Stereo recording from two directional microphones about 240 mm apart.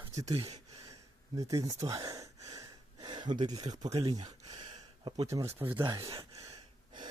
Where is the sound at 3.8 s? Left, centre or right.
Centre.